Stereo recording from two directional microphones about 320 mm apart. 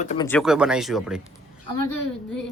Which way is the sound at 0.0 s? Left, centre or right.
Left.